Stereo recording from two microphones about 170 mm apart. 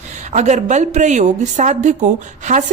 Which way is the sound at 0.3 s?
45° right (ahead or behind).